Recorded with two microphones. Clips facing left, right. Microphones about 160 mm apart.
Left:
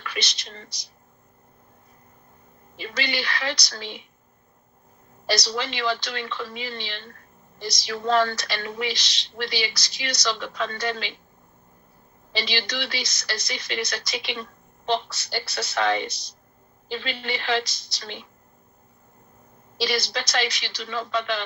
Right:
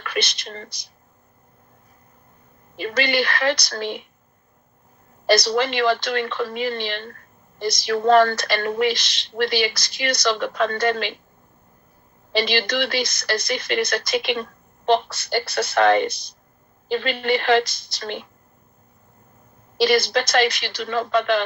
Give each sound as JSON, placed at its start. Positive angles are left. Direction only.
{"t": 0.0, "sound": "speech", "side_deg": -55}
{"t": 2.7, "sound": "speech", "side_deg": -55}
{"t": 5.2, "sound": "speech", "side_deg": -55}
{"t": 12.3, "sound": "speech", "side_deg": -55}
{"t": 19.7, "sound": "speech", "side_deg": -55}